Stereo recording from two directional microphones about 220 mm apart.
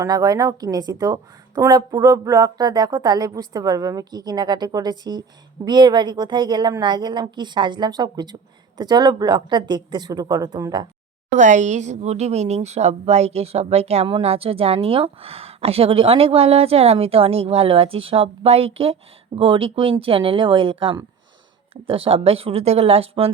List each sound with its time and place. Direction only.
0.0 s a woman's voice: 15° right (ahead or behind)
11.3 s speech: 35° right (ahead or behind)